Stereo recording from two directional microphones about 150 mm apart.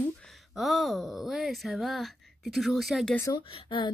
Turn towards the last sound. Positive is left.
turn(degrees=35)  # may be behind; listen again after turning